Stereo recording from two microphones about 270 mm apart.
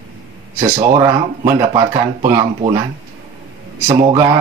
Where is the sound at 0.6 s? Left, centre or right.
Centre.